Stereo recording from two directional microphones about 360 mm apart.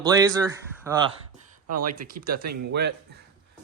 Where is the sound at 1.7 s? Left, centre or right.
Right.